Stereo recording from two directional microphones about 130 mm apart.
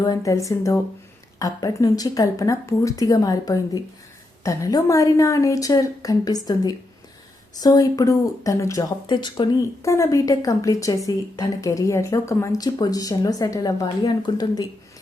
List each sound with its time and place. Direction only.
0.0 s a woman's voice: 25° left (ahead or behind)
9.0 s speech: 35° left (ahead or behind)
9.8 s a woman's voice: 25° left (ahead or behind)